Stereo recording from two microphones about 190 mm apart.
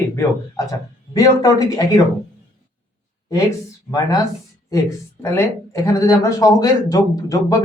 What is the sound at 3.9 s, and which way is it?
Speech, 20° left (ahead or behind).